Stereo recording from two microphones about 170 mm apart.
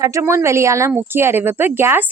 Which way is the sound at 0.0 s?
15° right (ahead or behind).